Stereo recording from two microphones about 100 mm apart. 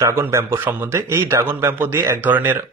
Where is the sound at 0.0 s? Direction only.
25° right (ahead or behind).